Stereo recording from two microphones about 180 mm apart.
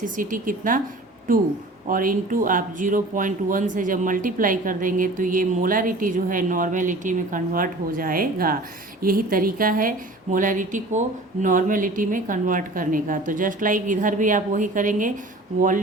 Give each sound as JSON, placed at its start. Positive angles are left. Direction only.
{"t": 0.0, "sound": "speech", "side_deg": -50}